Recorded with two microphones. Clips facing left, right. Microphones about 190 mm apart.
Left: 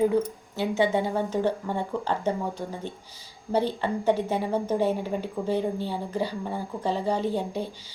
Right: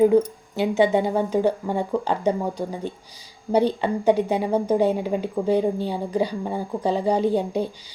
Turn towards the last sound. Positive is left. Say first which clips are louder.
# right 6 dB
turn(degrees=-15)  # may be behind; listen again after turning